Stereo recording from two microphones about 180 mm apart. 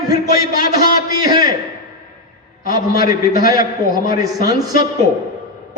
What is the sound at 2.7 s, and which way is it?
Speech, 20° right (ahead or behind).